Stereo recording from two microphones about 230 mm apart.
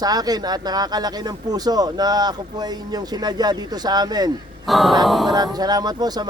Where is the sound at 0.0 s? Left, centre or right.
Centre.